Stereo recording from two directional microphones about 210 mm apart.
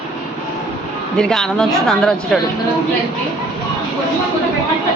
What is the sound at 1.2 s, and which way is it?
A woman's voice, 5° left (ahead or behind).